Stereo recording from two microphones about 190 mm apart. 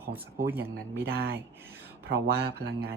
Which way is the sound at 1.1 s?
60° right (ahead or behind).